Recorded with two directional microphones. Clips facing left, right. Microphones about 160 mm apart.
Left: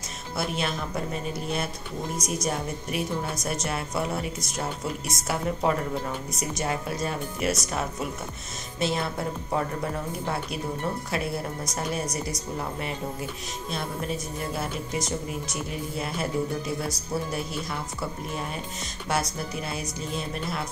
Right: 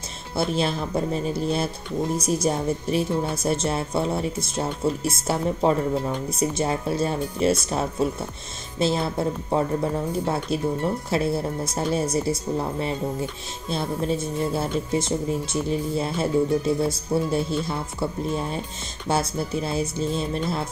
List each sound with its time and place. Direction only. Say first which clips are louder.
0.4 s a woman's voice: right 6 dB; 30° right (ahead or behind)